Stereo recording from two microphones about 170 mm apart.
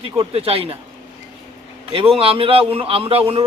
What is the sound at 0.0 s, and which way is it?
Speech, 35° right (ahead or behind).